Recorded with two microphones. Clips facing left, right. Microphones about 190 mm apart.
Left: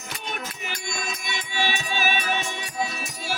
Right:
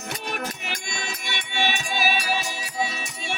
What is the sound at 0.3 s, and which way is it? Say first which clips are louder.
Music: right 2 dB; 65° right (ahead or behind).